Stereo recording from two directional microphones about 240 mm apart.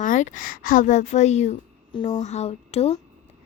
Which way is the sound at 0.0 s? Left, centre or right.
Left.